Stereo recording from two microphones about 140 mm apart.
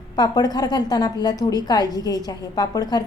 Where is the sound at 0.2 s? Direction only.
30° left (ahead or behind).